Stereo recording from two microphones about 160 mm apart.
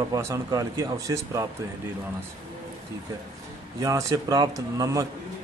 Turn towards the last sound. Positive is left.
turn(degrees=-20)  # may be behind; listen again after turning